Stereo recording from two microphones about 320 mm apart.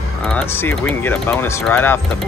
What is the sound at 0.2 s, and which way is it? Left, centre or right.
Speech, centre.